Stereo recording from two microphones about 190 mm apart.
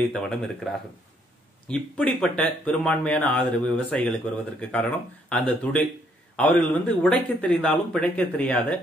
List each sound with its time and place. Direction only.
0.1 s speech: centre (ahead or behind)